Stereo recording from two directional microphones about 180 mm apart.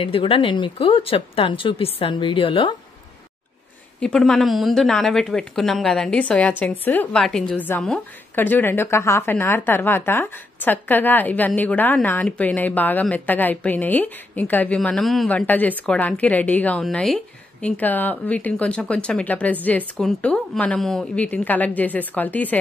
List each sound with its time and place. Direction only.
0.0 s speech: 30° left (ahead or behind)
4.0 s a woman's voice: 5° left (ahead or behind)